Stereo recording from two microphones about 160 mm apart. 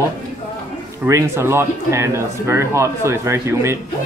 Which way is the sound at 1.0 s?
15° right (ahead or behind).